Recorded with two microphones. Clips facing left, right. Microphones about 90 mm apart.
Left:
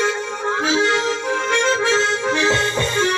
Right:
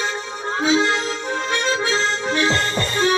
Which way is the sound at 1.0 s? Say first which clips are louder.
Left 4 dB; 60° left (ahead or behind).